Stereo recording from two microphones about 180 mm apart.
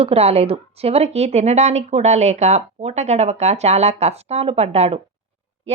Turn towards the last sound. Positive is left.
turn(degrees=-35)  # may be behind; listen again after turning